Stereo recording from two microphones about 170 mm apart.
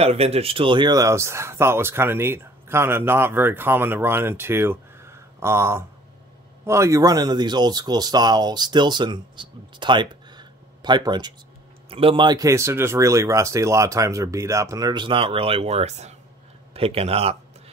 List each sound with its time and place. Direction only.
0.0 s speech: 35° right (ahead or behind)